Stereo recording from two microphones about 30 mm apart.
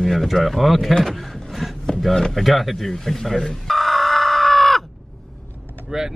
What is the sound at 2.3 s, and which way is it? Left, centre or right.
Speech, centre.